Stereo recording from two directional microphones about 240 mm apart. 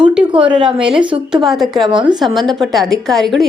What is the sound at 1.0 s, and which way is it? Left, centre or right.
Speech, centre.